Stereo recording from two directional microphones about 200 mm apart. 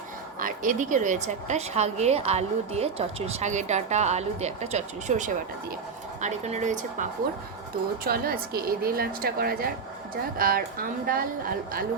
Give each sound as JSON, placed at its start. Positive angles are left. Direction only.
{"t": 0.3, "sound": "a woman's voice", "side_deg": -40}